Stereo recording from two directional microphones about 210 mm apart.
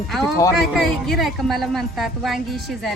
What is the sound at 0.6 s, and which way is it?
A woman's voice, centre (ahead or behind).